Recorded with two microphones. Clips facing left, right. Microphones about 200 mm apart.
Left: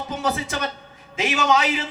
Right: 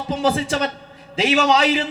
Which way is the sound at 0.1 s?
30° right (ahead or behind).